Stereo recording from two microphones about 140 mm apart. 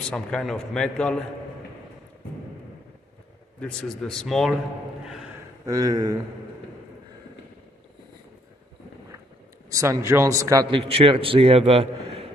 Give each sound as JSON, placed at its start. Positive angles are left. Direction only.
{"t": 0.1, "sound": "a man's voice", "side_deg": 5}
{"t": 3.5, "sound": "a man's voice", "side_deg": 5}
{"t": 5.7, "sound": "a man's voice", "side_deg": -25}
{"t": 9.7, "sound": "a man's voice", "side_deg": -20}
{"t": 10.7, "sound": "a man's voice", "side_deg": -40}